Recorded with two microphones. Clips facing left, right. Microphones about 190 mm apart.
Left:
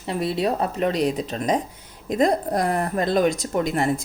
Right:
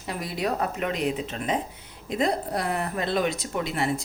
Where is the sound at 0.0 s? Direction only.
30° left (ahead or behind).